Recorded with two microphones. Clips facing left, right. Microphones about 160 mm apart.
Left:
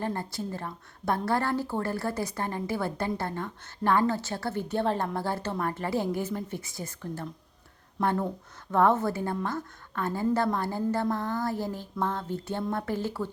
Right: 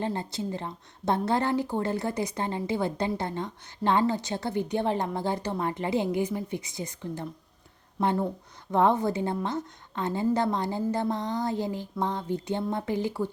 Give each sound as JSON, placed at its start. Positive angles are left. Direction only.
{"t": 0.0, "sound": "a woman's voice", "side_deg": -20}